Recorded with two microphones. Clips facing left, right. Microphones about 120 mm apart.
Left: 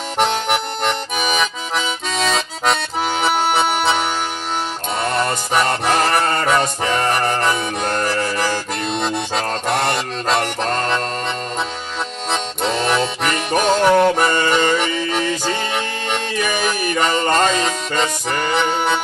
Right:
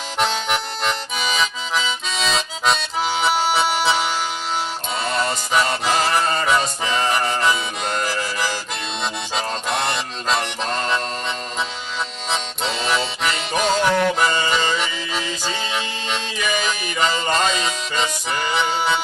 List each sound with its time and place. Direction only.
0.2 s accordion: 55° left (ahead or behind)
5.0 s music: 50° left (ahead or behind)
12.3 s music: 55° left (ahead or behind)